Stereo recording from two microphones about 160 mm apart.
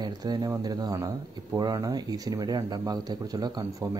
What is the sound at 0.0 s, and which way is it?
Speech, 25° right (ahead or behind).